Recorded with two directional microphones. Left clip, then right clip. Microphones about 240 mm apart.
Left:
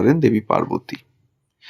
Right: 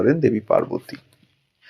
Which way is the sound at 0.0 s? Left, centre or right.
Left.